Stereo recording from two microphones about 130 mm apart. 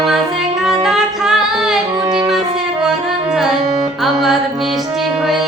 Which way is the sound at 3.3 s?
Centre (ahead or behind).